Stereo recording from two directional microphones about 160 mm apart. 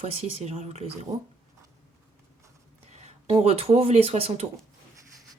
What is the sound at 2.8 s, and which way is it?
Speech, 45° right (ahead or behind).